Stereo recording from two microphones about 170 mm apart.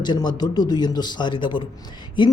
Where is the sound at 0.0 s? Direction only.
25° left (ahead or behind).